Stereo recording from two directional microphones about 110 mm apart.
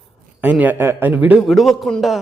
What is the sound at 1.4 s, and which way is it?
Speech, centre (ahead or behind).